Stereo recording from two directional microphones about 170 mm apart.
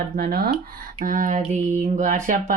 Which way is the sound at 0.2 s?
60° right (ahead or behind).